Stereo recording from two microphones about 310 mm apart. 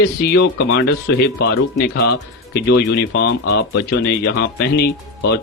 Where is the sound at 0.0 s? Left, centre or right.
Left.